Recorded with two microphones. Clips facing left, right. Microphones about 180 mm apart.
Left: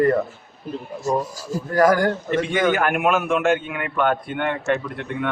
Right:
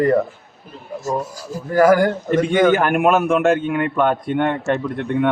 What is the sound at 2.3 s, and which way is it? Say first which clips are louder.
A man's voice: right 7 dB; 45° right (ahead or behind).